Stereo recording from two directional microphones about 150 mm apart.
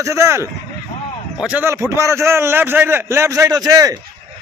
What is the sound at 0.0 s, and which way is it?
A man's voice, 20° right (ahead or behind).